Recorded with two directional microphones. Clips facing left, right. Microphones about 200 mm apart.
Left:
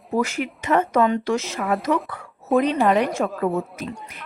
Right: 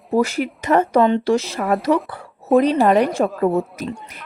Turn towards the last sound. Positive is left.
turn(degrees=-35)  # may be behind; listen again after turning